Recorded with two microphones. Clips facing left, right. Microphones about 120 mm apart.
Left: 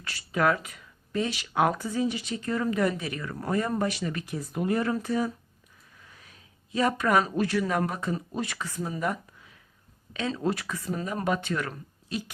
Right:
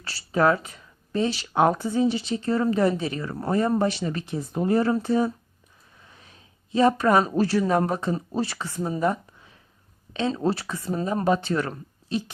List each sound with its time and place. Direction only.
0.0 s speech: 30° right (ahead or behind)